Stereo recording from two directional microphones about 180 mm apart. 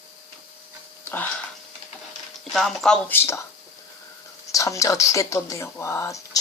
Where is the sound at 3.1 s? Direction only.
15° left (ahead or behind).